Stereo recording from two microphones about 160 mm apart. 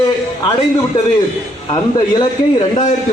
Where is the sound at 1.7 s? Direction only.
25° left (ahead or behind).